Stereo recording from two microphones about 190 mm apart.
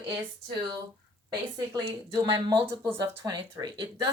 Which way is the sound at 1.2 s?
20° right (ahead or behind).